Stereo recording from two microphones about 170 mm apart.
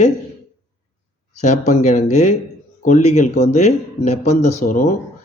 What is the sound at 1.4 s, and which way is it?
Speech, 45° left (ahead or behind).